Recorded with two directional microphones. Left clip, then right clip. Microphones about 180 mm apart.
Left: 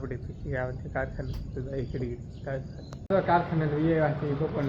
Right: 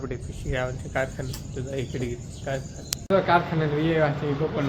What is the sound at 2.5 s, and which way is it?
Speech, 15° right (ahead or behind).